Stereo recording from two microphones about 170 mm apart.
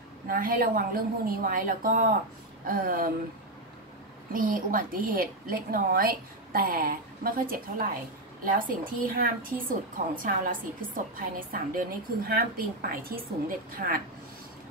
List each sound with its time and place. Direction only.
0.3 s a woman's voice: 55° right (ahead or behind)
4.3 s a woman's voice: 55° right (ahead or behind)